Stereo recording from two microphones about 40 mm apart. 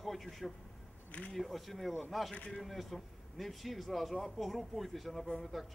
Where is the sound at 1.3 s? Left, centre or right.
Centre.